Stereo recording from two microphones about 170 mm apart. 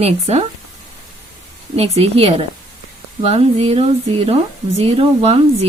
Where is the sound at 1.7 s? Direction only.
35° right (ahead or behind).